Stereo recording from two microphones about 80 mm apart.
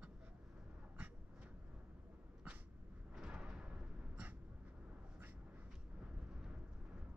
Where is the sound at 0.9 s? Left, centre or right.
Centre.